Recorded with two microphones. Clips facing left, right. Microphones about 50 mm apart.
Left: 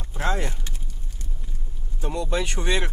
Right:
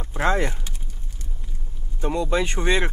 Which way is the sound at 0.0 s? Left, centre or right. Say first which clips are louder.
Right 5 dB; right.